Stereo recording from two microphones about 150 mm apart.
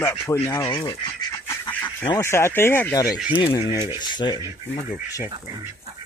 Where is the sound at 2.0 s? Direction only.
20° left (ahead or behind).